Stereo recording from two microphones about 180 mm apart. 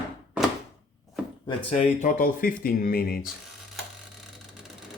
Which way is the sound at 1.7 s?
45° left (ahead or behind).